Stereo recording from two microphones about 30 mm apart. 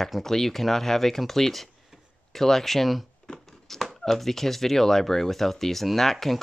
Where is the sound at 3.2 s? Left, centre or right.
Centre.